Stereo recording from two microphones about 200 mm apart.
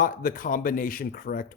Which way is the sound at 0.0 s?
45° left (ahead or behind).